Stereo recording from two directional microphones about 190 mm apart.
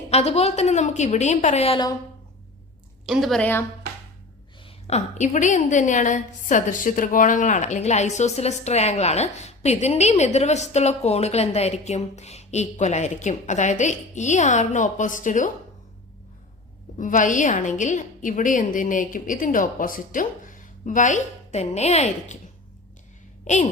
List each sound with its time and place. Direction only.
0.1 s a woman's voice: 35° left (ahead or behind)
3.1 s a woman's voice: centre (ahead or behind)
4.6 s a woman's voice: 35° left (ahead or behind)
17.0 s a woman's voice: 45° left (ahead or behind)